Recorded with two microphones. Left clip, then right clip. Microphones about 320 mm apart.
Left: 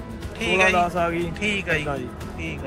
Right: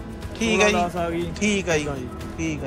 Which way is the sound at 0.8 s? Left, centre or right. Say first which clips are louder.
Left 2 dB; centre.